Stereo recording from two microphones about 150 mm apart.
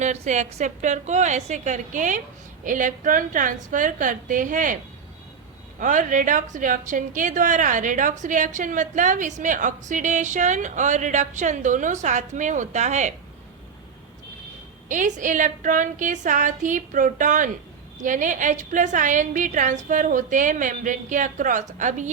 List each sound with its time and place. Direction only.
0.0 s a woman's voice: 50° right (ahead or behind)
5.8 s a woman's voice: 60° right (ahead or behind)
14.8 s a woman's voice: 55° right (ahead or behind)